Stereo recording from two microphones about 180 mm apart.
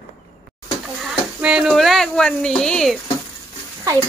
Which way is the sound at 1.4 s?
Centre (ahead or behind).